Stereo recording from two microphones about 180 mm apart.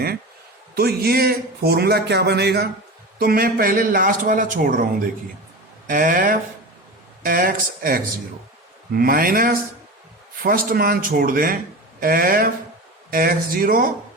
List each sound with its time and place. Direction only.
0.8 s speech: 60° right (ahead or behind)
3.2 s speech: 55° right (ahead or behind)
5.9 s speech: 50° right (ahead or behind)